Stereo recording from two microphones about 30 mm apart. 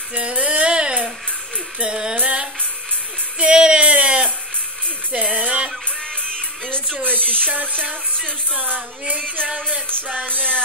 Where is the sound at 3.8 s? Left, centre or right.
Right.